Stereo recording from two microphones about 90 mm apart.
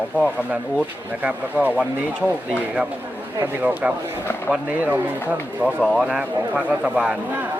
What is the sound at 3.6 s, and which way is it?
Speech, 15° right (ahead or behind).